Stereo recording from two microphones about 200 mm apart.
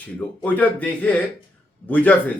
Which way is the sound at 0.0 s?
10° left (ahead or behind).